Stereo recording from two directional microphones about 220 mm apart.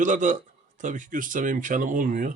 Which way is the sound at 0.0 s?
35° right (ahead or behind).